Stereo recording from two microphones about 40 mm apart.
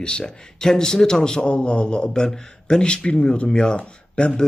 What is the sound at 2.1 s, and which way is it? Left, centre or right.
Speech, centre.